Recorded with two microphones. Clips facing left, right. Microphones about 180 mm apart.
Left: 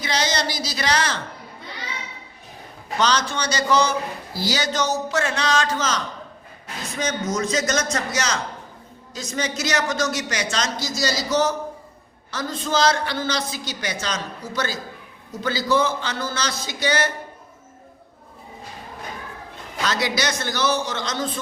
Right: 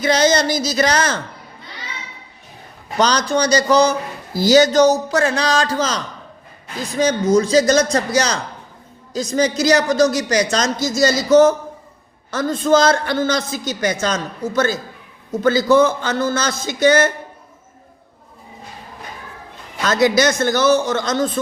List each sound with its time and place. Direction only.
0.0 s a man's voice: 50° right (ahead or behind)
3.0 s a man's voice: 40° right (ahead or behind)
19.8 s a man's voice: 50° right (ahead or behind)